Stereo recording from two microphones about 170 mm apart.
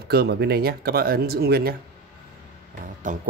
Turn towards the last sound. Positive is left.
turn(degrees=-50)  # may be behind; listen again after turning